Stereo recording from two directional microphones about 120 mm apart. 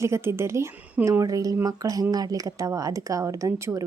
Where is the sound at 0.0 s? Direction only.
20° right (ahead or behind).